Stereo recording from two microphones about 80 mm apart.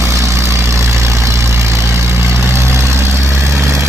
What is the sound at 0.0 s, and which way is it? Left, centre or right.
Vehicle, right.